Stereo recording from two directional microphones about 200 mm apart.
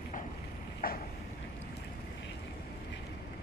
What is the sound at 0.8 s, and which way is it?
Vehicle, 45° left (ahead or behind).